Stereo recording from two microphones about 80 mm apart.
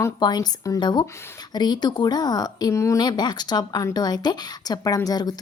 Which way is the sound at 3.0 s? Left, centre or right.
Left.